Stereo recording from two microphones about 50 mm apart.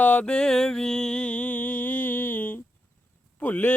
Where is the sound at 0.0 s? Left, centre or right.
Left.